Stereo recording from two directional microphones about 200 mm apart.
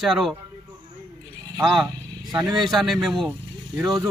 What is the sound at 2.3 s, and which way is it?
Speech, 20° right (ahead or behind).